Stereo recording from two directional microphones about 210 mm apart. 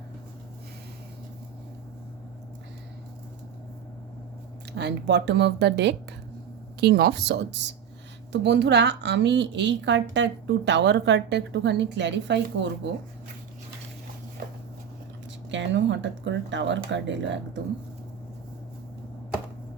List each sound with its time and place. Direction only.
4.7 s a woman's voice: 55° right (ahead or behind)
15.4 s a woman's voice: 60° right (ahead or behind)